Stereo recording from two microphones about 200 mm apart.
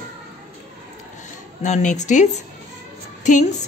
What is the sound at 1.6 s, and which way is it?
Speech, 35° left (ahead or behind).